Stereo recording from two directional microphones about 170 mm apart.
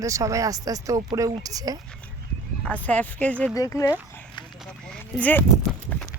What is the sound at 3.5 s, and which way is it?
Speech, 20° left (ahead or behind).